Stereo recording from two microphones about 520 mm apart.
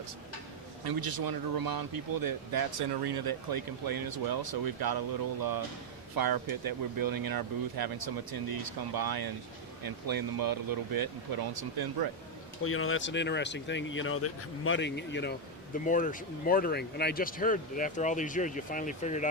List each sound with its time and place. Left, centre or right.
0.9 s speech: right
12.6 s speech: left